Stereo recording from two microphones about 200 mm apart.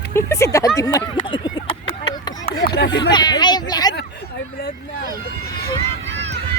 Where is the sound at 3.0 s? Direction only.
20° left (ahead or behind).